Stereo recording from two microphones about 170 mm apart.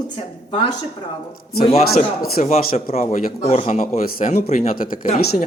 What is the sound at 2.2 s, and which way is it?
A man's voice, 45° left (ahead or behind).